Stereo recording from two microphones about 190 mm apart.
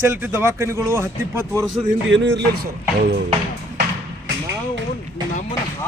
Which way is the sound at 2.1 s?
70° right (ahead or behind).